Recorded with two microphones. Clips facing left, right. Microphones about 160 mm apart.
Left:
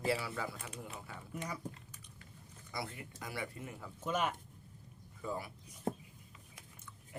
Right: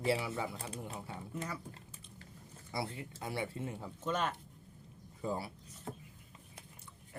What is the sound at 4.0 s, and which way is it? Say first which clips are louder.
Speech: even; 10° left (ahead or behind).